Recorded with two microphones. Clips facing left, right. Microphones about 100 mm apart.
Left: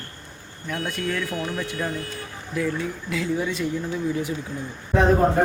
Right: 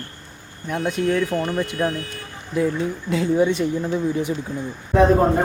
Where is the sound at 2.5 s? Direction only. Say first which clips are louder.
Right 5 dB; 25° right (ahead or behind).